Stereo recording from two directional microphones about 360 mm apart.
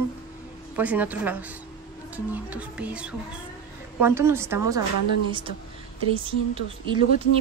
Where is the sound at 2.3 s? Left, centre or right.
Centre.